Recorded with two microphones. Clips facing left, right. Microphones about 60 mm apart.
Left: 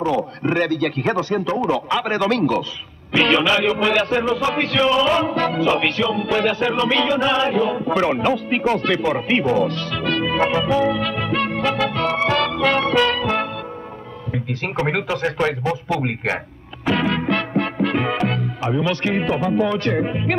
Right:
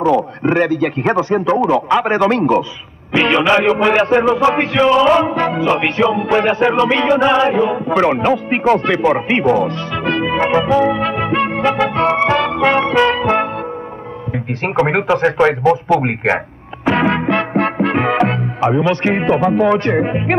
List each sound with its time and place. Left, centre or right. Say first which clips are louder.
0.0 s music: right 6 dB; right
14.9 s a man's voice: right 6 dB; right
16.8 s music: right 5 dB; right
20.0 s a man's voice: right 5 dB; right